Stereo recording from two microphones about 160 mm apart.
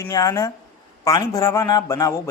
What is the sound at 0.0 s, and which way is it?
A man's voice, 20° left (ahead or behind).